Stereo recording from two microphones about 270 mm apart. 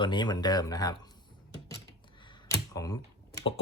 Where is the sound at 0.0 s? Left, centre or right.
Centre.